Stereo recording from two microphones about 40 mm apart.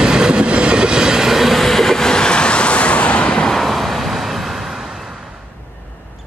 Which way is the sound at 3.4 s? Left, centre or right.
Centre.